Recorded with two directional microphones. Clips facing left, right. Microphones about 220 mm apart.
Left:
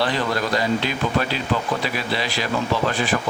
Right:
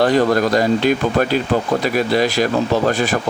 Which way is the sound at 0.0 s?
45° right (ahead or behind).